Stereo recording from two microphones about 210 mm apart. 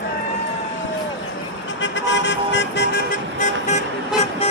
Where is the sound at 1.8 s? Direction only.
60° left (ahead or behind); by 3.8 s 35° left (ahead or behind).